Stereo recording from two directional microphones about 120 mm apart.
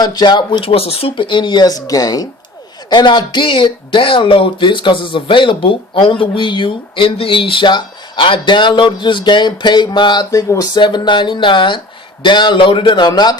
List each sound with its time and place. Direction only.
0.0 s speech: 35° left (ahead or behind)